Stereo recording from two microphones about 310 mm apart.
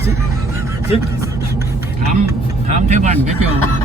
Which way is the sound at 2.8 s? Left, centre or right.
Right.